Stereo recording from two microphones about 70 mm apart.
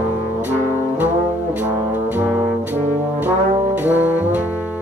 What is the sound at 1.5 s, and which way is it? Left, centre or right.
Brass instrument, right.